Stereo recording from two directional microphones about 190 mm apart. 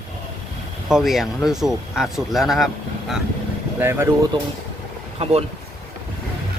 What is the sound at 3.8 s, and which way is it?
Speech, 10° right (ahead or behind).